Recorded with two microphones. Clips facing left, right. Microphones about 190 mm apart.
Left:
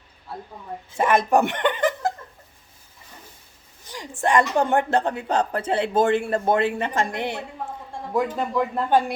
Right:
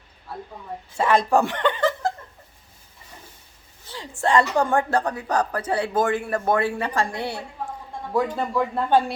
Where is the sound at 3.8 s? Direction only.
15° left (ahead or behind).